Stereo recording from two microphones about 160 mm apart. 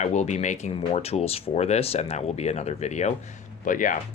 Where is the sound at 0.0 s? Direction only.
45° left (ahead or behind).